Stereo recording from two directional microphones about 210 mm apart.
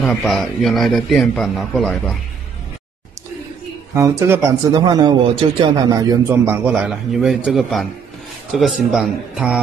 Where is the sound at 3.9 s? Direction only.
15° right (ahead or behind).